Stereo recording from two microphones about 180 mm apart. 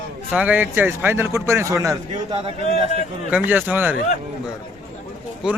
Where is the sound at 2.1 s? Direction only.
35° right (ahead or behind).